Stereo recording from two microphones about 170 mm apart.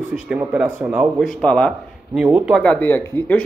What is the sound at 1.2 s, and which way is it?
Speech, 5° left (ahead or behind).